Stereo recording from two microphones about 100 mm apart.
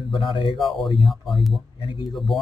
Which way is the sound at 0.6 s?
Centre (ahead or behind).